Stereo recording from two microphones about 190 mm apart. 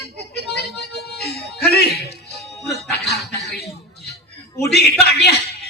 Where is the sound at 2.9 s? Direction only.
60° left (ahead or behind).